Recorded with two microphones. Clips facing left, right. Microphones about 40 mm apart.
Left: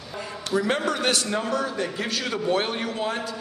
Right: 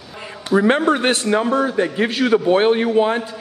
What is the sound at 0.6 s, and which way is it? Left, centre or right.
A man's voice, right.